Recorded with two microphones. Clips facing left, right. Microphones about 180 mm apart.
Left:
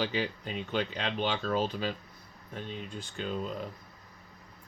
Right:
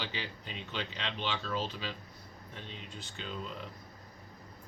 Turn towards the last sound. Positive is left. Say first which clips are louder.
# left 7 dB
turn(degrees=45)  # may be behind; listen again after turning